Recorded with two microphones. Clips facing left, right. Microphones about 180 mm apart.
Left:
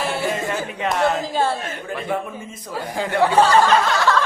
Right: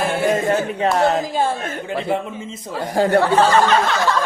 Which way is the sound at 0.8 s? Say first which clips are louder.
Even; 35° right (ahead or behind).